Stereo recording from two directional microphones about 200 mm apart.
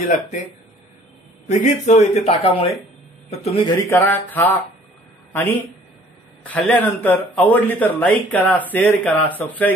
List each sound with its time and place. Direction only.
0.1 s speech: 40° left (ahead or behind)
1.5 s speech: 35° left (ahead or behind); by 4.6 s 10° left (ahead or behind)
6.5 s speech: 10° left (ahead or behind)